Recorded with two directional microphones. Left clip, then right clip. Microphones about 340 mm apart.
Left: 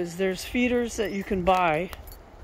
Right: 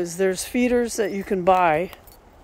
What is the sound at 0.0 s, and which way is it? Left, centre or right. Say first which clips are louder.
Speech: right 5 dB; centre.